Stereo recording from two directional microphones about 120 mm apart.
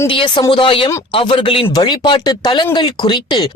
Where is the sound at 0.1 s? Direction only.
45° left (ahead or behind).